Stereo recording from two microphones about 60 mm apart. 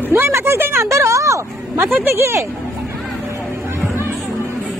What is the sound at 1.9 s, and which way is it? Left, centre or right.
Speech, right.